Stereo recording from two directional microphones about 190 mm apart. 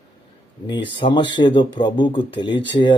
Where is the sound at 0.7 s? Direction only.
25° left (ahead or behind).